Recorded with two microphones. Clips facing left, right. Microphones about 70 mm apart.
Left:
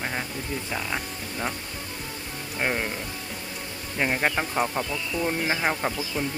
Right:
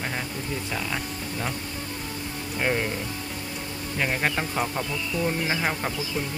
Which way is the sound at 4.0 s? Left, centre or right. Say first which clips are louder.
Left 1 dB; centre.